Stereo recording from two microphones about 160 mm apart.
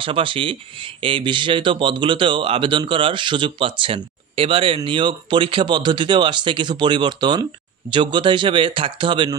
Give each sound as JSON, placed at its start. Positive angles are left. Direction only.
{"t": 0.0, "sound": "speech", "side_deg": -35}